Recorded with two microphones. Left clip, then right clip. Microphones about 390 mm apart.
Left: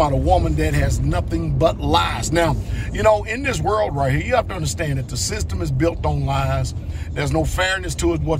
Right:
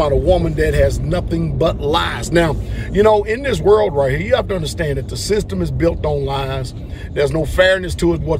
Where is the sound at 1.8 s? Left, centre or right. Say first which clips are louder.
Right 1 dB; centre.